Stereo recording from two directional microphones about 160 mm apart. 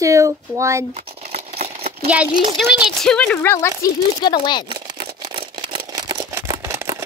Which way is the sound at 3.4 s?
20° left (ahead or behind).